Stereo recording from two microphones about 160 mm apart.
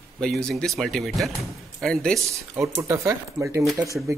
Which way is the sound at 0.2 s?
5° left (ahead or behind).